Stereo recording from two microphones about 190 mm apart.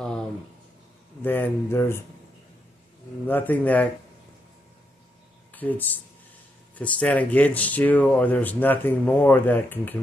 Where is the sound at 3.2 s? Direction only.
10° left (ahead or behind).